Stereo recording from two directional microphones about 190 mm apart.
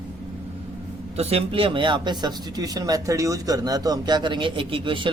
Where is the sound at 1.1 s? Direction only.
30° right (ahead or behind).